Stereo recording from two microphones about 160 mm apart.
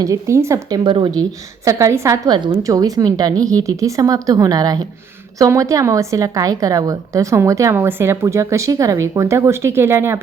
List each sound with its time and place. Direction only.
0.0 s a woman's voice: 20° right (ahead or behind)
0.9 s a woman's voice: 30° right (ahead or behind)
1.6 s a woman's voice: 20° right (ahead or behind)